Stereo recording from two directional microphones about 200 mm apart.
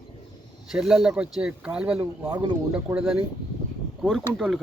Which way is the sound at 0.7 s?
Centre (ahead or behind).